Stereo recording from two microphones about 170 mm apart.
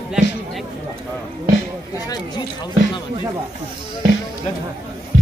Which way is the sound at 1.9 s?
20° left (ahead or behind).